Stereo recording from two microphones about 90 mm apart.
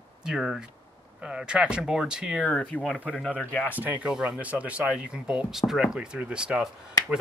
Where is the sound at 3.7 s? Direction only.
20° right (ahead or behind).